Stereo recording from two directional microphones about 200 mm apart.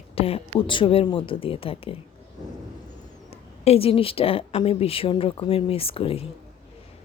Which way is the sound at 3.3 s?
30° left (ahead or behind).